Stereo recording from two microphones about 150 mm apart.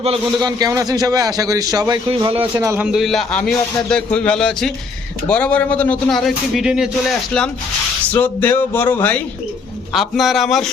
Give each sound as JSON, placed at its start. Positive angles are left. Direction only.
{"t": 0.3, "sound": "a man's voice", "side_deg": -25}
{"t": 2.0, "sound": "speech", "side_deg": -35}
{"t": 2.6, "sound": "a man's voice", "side_deg": -20}
{"t": 2.8, "sound": "a man's voice", "side_deg": 0}
{"t": 9.9, "sound": "a man's voice", "side_deg": 0}